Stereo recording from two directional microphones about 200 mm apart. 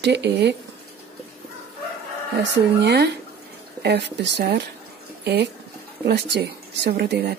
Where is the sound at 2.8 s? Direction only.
55° right (ahead or behind).